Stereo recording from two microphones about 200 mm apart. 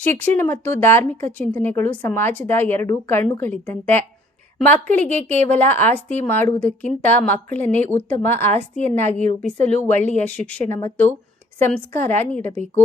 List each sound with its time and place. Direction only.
0.0 s speech: 10° left (ahead or behind)
9.1 s speech: 35° left (ahead or behind)
10.2 s speech: 5° left (ahead or behind)